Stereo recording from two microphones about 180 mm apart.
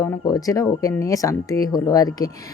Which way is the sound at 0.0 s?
20° left (ahead or behind).